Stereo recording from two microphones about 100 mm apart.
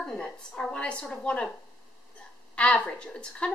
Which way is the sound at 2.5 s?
10° left (ahead or behind).